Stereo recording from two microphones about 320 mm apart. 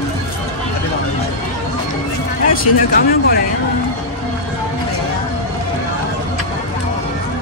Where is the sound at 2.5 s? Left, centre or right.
Left.